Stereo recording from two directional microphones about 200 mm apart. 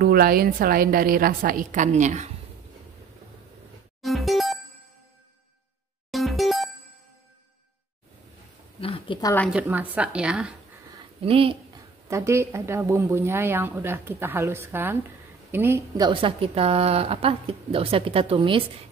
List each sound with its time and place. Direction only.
0.0 s a woman's voice: 50° right (ahead or behind)
4.0 s music: centre (ahead or behind)
6.1 s music: centre (ahead or behind)
8.8 s a woman's voice: 25° left (ahead or behind)
9.5 s a woman's voice: 5° right (ahead or behind)
11.2 s a woman's voice: 30° right (ahead or behind)
12.1 s speech: 15° right (ahead or behind)
16.1 s a woman's voice: 25° right (ahead or behind)